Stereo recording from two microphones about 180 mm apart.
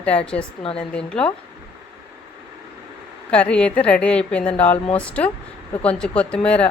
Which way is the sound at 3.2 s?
5° left (ahead or behind).